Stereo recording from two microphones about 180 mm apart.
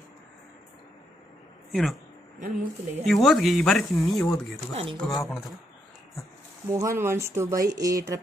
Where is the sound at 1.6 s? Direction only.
Centre (ahead or behind).